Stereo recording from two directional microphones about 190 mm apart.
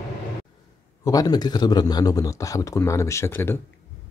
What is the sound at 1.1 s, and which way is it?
Speech, 20° left (ahead or behind).